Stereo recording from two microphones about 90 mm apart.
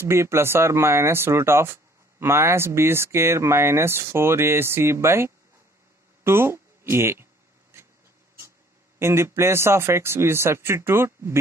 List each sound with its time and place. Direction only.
0.0 s speech: 30° right (ahead or behind)
7.7 s a sound: 30° right (ahead or behind)
9.0 s speech: 30° right (ahead or behind)